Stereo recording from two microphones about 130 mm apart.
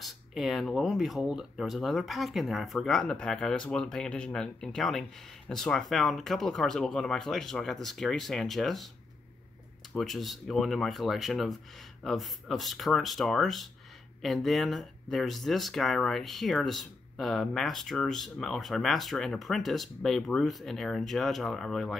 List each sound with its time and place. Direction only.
0.0 s speech: centre (ahead or behind)
9.9 s speech: centre (ahead or behind)